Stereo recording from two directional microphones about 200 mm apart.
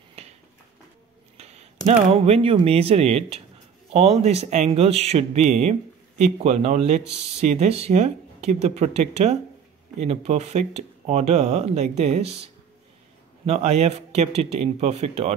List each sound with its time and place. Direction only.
0.2 s a sound: 30° right (ahead or behind)
1.9 s speech: 30° right (ahead or behind)
13.5 s speech: 35° right (ahead or behind)